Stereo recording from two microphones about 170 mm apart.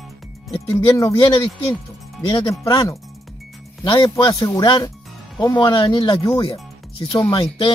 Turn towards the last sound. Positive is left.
turn(degrees=25)  # may be behind; listen again after turning